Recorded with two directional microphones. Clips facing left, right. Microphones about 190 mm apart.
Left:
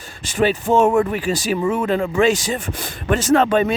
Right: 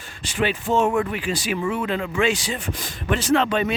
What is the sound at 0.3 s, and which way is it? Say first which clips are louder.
Speech: left 5 dB; 45° left (ahead or behind).